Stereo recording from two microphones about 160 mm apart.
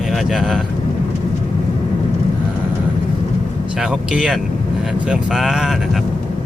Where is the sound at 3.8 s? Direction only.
5° right (ahead or behind).